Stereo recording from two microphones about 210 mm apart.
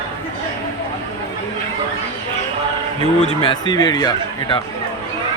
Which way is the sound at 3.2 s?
25° left (ahead or behind).